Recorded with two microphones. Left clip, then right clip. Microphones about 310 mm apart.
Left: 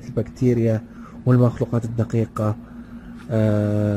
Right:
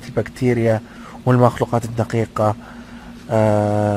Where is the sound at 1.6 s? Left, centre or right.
Right.